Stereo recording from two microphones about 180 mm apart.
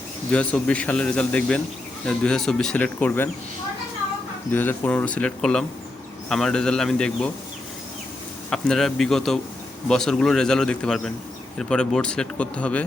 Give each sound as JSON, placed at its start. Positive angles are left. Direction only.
{"t": 0.3, "sound": "a man's voice", "side_deg": 5}
{"t": 4.5, "sound": "a man's voice", "side_deg": 10}
{"t": 8.4, "sound": "speech", "side_deg": 5}